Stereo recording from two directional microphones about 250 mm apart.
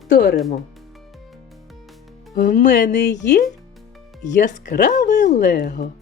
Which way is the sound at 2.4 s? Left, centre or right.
Left.